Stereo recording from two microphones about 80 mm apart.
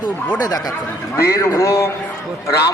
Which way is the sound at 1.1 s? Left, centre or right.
Left.